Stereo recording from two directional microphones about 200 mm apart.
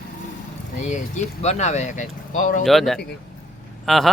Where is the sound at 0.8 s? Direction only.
35° left (ahead or behind).